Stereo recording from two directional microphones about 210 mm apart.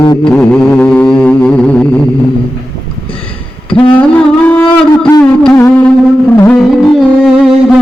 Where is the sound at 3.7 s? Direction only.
5° left (ahead or behind).